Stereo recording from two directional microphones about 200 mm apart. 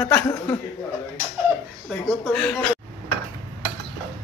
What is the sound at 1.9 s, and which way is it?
Speech, 5° left (ahead or behind).